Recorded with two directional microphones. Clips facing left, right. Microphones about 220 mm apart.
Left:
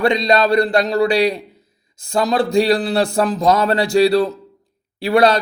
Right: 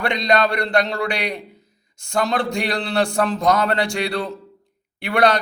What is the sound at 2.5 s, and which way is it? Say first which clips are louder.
A man's voice: left 8 dB; 20° left (ahead or behind).